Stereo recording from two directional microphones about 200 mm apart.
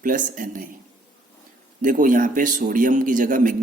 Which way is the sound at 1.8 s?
40° right (ahead or behind).